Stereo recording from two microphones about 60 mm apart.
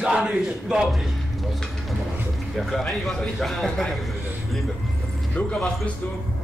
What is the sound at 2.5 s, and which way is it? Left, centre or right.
A man's voice, centre.